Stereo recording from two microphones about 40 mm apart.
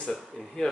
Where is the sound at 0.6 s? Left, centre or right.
Centre.